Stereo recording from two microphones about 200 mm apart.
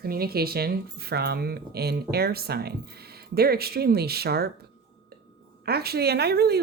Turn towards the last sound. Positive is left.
turn(degrees=-55)  # may be behind; listen again after turning